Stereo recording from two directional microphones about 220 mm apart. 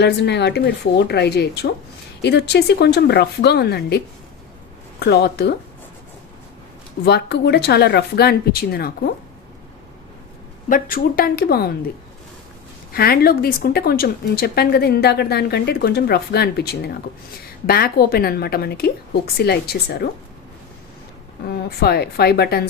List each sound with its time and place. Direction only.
0.0 s a woman's voice: 50° left (ahead or behind)
7.0 s a woman's voice: 50° left (ahead or behind)
10.7 s speech: 40° left (ahead or behind)
12.9 s a woman's voice: 45° left (ahead or behind)
21.4 s a woman's voice: 45° left (ahead or behind)